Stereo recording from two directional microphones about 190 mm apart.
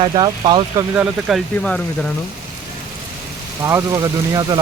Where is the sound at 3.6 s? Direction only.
15° right (ahead or behind).